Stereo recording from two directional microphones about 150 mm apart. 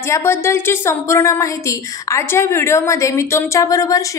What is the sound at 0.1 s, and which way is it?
A woman's voice, 15° left (ahead or behind).